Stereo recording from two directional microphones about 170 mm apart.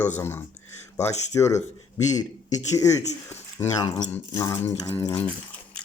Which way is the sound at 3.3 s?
15° left (ahead or behind).